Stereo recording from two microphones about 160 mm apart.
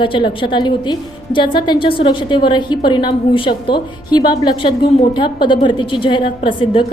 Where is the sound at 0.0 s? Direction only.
30° left (ahead or behind).